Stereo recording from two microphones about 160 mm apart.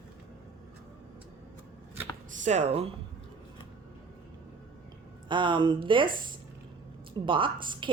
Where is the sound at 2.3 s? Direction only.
45° right (ahead or behind).